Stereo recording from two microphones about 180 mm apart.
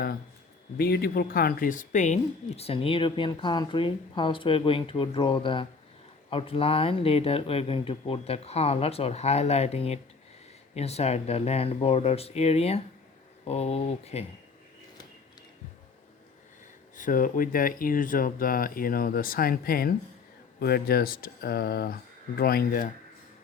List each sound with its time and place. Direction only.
0.8 s speech: 60° left (ahead or behind)
2.6 s speech: 30° left (ahead or behind)
17.0 s speech: 50° left (ahead or behind)